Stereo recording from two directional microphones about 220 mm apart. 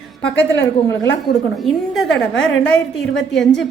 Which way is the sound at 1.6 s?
Centre (ahead or behind).